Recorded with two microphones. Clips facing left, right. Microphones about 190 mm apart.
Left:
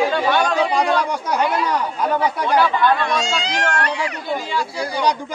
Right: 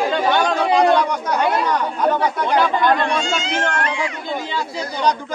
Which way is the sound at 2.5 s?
20° right (ahead or behind).